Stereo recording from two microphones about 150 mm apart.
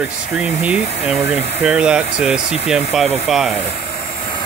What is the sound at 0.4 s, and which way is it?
Speech, 5° right (ahead or behind).